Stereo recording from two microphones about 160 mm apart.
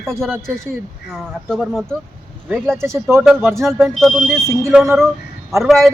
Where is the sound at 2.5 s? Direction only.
10° right (ahead or behind).